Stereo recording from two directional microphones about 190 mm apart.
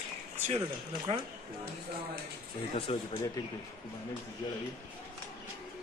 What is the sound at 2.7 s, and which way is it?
Speech, 30° left (ahead or behind).